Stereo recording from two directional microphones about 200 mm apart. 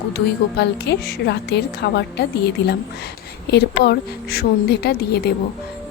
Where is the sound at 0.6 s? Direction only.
55° left (ahead or behind).